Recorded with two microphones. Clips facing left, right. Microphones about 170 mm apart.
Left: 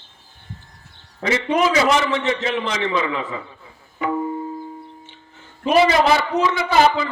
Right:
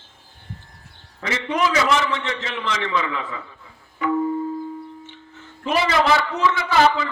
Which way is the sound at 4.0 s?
20° left (ahead or behind).